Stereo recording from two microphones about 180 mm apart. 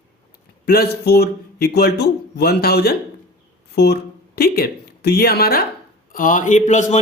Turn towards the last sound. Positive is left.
turn(degrees=40)  # may be behind; listen again after turning